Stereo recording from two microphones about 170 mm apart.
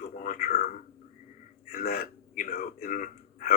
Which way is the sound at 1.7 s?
65° left (ahead or behind).